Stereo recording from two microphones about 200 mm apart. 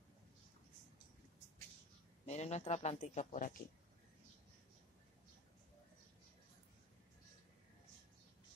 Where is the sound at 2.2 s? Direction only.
35° left (ahead or behind).